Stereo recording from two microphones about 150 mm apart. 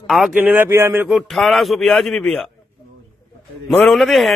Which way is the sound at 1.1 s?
Centre (ahead or behind).